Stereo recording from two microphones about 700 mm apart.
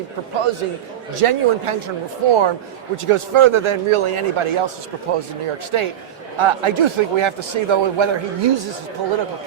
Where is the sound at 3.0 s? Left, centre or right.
Right.